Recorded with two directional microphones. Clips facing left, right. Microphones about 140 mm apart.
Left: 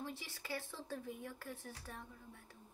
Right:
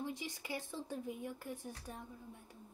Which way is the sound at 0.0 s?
15° right (ahead or behind).